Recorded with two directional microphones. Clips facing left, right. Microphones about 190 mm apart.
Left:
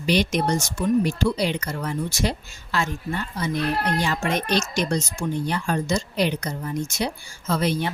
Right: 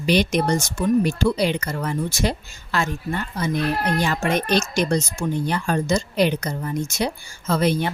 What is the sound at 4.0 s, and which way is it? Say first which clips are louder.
A woman's voice: right 3 dB; 50° right (ahead or behind).